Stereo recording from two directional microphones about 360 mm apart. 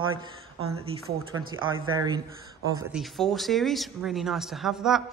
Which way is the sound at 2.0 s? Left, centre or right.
Centre.